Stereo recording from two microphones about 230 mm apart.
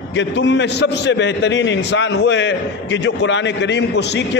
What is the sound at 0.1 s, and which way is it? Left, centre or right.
A man's voice, left.